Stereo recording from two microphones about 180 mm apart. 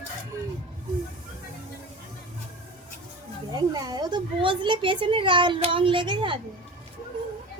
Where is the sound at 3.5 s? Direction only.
20° right (ahead or behind).